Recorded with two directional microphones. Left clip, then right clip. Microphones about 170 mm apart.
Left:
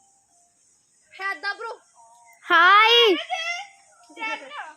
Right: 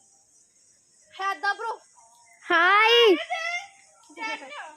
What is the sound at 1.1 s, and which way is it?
Speech, 30° right (ahead or behind).